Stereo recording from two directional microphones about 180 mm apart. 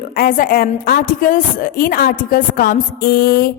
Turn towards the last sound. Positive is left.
turn(degrees=55)  # may be behind; listen again after turning